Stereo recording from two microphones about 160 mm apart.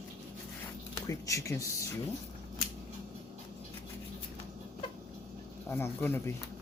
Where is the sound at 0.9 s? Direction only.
20° left (ahead or behind).